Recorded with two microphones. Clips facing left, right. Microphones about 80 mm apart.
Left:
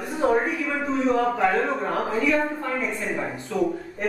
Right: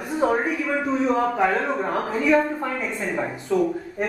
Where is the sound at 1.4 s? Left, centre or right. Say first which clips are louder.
Right 1 dB; centre.